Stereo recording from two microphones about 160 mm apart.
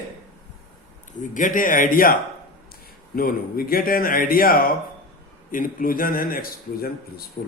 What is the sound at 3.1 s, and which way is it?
A man's voice, 65° left (ahead or behind).